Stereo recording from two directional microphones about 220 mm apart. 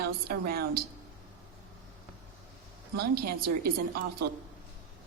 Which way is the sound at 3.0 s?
45° right (ahead or behind).